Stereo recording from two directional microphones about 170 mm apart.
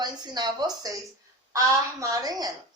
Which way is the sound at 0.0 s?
25° right (ahead or behind).